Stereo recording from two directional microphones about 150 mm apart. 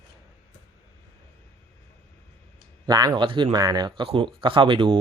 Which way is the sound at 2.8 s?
25° right (ahead or behind).